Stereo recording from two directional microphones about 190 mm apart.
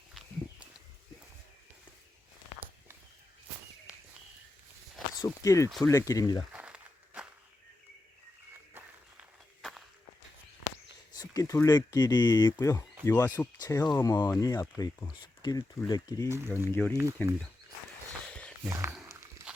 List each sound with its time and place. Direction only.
0.1 s walk: centre (ahead or behind)
5.2 s speech: 15° left (ahead or behind)
6.5 s a sound: 5° right (ahead or behind)
9.6 s walk: centre (ahead or behind)
11.2 s speech: 15° left (ahead or behind)
16.3 s speech: 15° right (ahead or behind)
16.7 s speech: 10° left (ahead or behind)
19.0 s wild animals: 15° right (ahead or behind)